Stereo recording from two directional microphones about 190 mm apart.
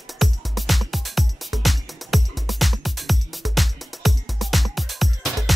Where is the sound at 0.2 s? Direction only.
Centre (ahead or behind).